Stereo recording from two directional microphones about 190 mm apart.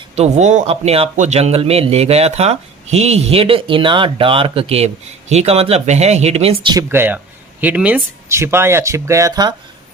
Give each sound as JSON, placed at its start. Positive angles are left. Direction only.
{"t": 0.2, "sound": "a man's voice", "side_deg": -40}
{"t": 6.8, "sound": "speech", "side_deg": -10}